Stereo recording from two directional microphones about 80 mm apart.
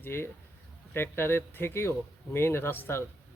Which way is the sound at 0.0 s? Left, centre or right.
Left.